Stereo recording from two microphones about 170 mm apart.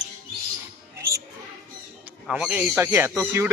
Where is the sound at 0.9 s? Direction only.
15° right (ahead or behind).